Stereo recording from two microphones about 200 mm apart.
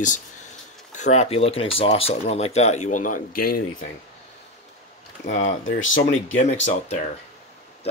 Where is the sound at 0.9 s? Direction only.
35° left (ahead or behind).